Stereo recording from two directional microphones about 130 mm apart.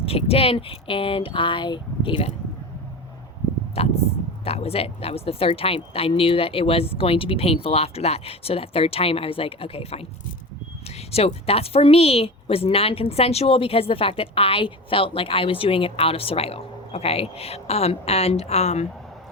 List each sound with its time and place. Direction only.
0.0 s a woman's voice: 50° left (ahead or behind)
3.8 s a woman's voice: 50° left (ahead or behind)
11.1 s a woman's voice: 50° left (ahead or behind)